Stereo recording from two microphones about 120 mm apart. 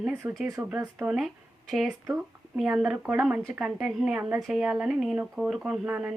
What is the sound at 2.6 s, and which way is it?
Speech, 5° right (ahead or behind).